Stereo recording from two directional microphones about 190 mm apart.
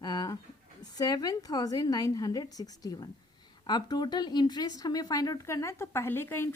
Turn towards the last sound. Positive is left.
turn(degrees=10)  # may be behind; listen again after turning